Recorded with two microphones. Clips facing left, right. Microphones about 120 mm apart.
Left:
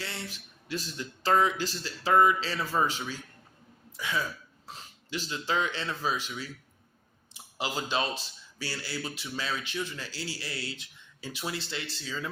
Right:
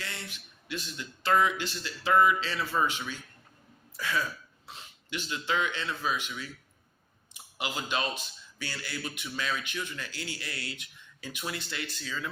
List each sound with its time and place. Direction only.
0.0 s speech: 35° left (ahead or behind)
3.9 s speech: 20° left (ahead or behind)
4.6 s speech: 40° left (ahead or behind)
7.6 s a man's voice: 30° left (ahead or behind)